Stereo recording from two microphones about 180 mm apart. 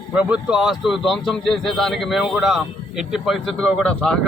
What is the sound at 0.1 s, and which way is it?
Speech, 5° right (ahead or behind).